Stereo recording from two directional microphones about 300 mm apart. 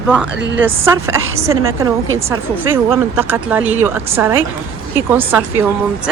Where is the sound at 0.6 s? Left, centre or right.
Centre.